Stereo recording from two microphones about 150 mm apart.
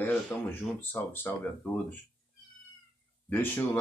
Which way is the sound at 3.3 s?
15° left (ahead or behind).